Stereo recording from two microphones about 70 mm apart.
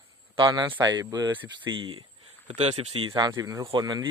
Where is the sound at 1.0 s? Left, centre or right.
Right.